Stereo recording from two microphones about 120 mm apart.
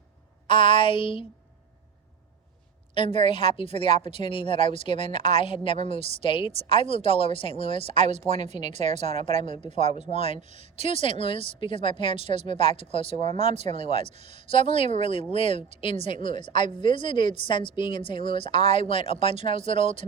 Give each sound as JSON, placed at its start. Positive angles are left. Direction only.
{"t": 0.4, "sound": "a woman's voice", "side_deg": 45}
{"t": 2.9, "sound": "a woman's voice", "side_deg": 45}
{"t": 8.3, "sound": "speech", "side_deg": -70}
{"t": 10.5, "sound": "a woman's voice", "side_deg": 55}
{"t": 13.1, "sound": "speech", "side_deg": -70}
{"t": 13.7, "sound": "a woman's voice", "side_deg": 50}